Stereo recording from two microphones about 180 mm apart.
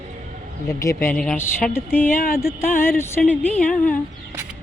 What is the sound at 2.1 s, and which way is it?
Speech, 55° left (ahead or behind).